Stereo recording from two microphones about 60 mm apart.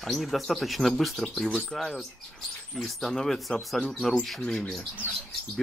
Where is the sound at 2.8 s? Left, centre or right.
Centre.